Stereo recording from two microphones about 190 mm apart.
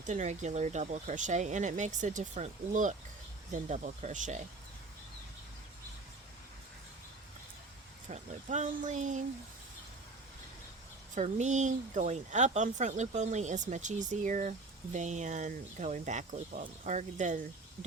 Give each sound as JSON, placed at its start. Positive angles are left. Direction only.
{"t": 0.0, "sound": "speech", "side_deg": -40}
{"t": 8.0, "sound": "speech", "side_deg": -40}
{"t": 11.1, "sound": "speech", "side_deg": -40}